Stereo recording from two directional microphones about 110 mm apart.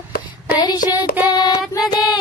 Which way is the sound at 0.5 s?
40° left (ahead or behind).